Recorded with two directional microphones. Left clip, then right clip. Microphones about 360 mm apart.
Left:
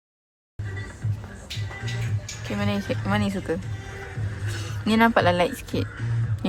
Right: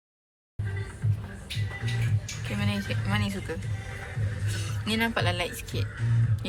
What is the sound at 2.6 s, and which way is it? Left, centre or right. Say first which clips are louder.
Speech: left 6 dB; centre.